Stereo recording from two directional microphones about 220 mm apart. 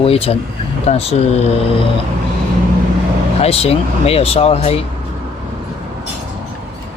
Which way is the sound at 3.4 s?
25° left (ahead or behind).